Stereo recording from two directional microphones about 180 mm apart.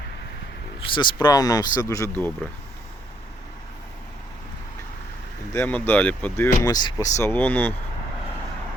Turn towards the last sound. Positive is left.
turn(degrees=10)  # may be behind; listen again after turning